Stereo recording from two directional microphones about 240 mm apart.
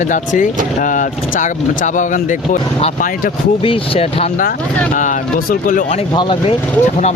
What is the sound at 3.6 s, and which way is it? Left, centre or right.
Speech, left.